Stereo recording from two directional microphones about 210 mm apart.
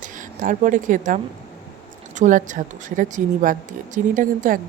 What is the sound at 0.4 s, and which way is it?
A woman's voice, 40° right (ahead or behind).